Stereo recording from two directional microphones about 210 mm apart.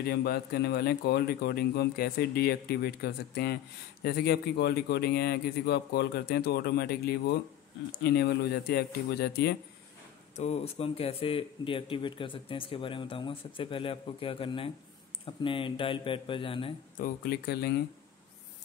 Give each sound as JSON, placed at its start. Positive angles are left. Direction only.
{"t": 0.0, "sound": "speech", "side_deg": 50}
{"t": 10.3, "sound": "speech", "side_deg": 30}
{"t": 16.9, "sound": "speech", "side_deg": 45}